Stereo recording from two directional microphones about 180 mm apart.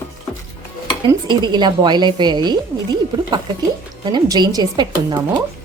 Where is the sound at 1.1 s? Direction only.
25° right (ahead or behind).